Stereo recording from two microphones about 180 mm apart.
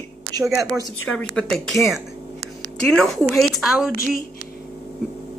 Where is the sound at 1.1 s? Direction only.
5° left (ahead or behind).